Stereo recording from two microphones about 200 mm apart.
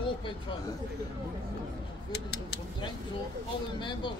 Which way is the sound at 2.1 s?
55° left (ahead or behind).